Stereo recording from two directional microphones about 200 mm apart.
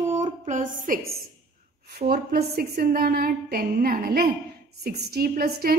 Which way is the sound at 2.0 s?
45° right (ahead or behind).